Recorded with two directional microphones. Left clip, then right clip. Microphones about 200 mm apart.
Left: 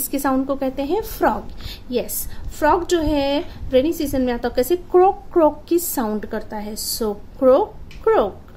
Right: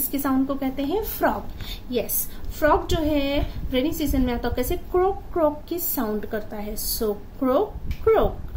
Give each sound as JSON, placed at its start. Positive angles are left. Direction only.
{"t": 0.1, "sound": "a woman's voice", "side_deg": 50}